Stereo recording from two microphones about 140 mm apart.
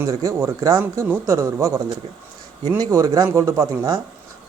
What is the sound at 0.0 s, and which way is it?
Speech, 25° right (ahead or behind).